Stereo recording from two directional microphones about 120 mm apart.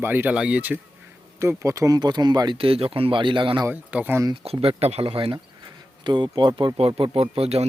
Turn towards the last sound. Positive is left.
turn(degrees=-55)  # may be behind; listen again after turning